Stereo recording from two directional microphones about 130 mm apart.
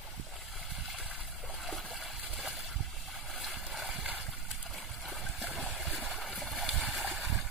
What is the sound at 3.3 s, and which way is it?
Boat, centre (ahead or behind).